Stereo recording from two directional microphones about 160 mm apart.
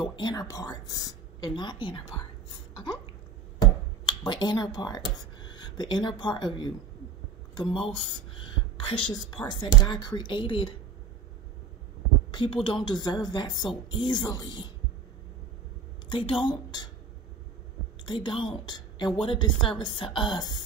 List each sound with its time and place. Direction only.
0.0 s a woman's voice: 25° left (ahead or behind)
4.0 s speech: 25° left (ahead or behind)
8.8 s a woman's voice: 30° left (ahead or behind)
12.3 s a woman's voice: 30° left (ahead or behind)
16.1 s a woman's voice: 30° left (ahead or behind)
18.0 s a woman's voice: 30° left (ahead or behind)